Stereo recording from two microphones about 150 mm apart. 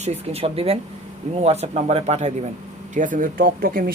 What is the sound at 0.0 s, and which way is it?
Speech, 45° right (ahead or behind).